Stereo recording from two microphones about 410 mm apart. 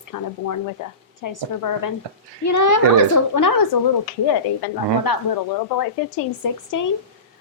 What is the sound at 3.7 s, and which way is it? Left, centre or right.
A woman's voice, left.